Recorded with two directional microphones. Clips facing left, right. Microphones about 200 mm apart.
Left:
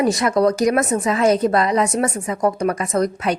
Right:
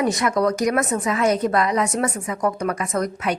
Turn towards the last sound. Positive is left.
turn(degrees=30)  # may be behind; listen again after turning